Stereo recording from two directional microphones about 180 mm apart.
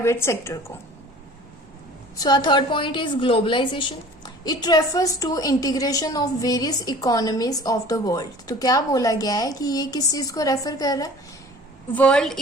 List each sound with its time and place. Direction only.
0.0 s speech: 15° left (ahead or behind)
2.1 s a woman's voice: 25° left (ahead or behind)
11.9 s a woman's voice: 5° left (ahead or behind)